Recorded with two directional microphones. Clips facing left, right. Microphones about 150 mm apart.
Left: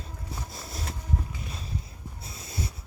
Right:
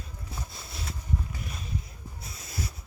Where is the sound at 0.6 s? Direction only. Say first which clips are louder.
Left 3 dB; 40° left (ahead or behind).